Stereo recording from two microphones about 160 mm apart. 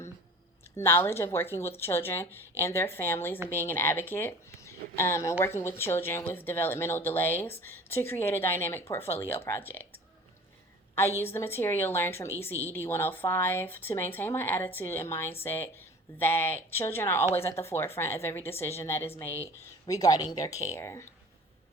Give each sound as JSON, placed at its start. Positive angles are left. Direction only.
{"t": 0.8, "sound": "a woman's voice", "side_deg": 15}
{"t": 11.2, "sound": "a woman's voice", "side_deg": 15}